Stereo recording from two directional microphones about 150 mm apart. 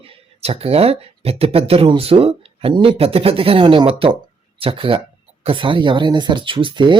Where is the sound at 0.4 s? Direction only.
40° right (ahead or behind).